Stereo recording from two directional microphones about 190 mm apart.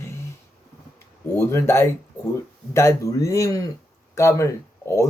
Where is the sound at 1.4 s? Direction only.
15° left (ahead or behind).